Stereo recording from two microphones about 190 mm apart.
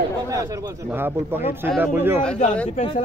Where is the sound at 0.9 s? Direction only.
10° right (ahead or behind).